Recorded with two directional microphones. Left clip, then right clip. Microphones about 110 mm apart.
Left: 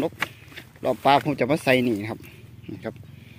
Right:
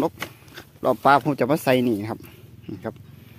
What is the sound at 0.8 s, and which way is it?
Speech, 50° right (ahead or behind).